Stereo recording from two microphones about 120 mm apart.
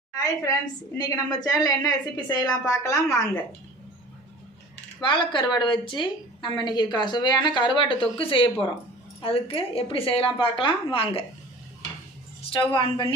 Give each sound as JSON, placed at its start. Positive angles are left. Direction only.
{"t": 0.1, "sound": "a sound", "side_deg": 30}
{"t": 0.9, "sound": "a woman's voice", "side_deg": 35}
{"t": 5.0, "sound": "a woman's voice", "side_deg": 40}
{"t": 12.5, "sound": "a woman's voice", "side_deg": 45}